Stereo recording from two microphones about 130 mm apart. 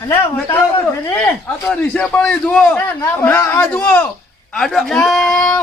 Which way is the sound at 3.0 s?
20° left (ahead or behind).